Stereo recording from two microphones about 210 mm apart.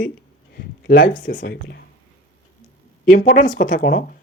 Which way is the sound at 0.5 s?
45° left (ahead or behind).